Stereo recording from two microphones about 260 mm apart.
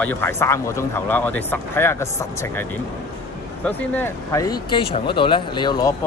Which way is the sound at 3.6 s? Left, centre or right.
Centre.